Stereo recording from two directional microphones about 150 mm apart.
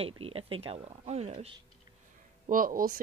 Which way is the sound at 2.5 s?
65° right (ahead or behind).